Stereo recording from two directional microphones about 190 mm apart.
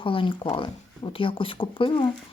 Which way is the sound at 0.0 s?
25° left (ahead or behind).